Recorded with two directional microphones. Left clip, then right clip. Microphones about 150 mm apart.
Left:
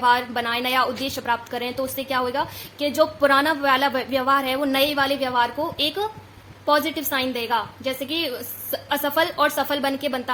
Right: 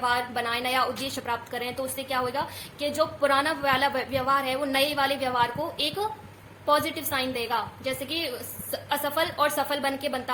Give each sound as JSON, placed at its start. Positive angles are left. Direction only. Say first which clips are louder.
{"t": 0.0, "sound": "a woman's voice", "louder": "left 6 dB", "side_deg": 85}